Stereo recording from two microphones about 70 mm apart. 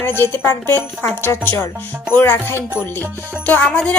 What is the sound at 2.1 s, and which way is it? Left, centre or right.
Speech, left.